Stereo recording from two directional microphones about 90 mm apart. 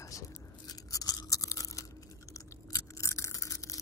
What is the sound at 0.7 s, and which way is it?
Toothbrush, 45° left (ahead or behind).